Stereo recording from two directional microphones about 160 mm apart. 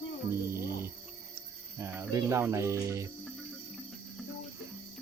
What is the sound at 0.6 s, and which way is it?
Speech, 15° right (ahead or behind).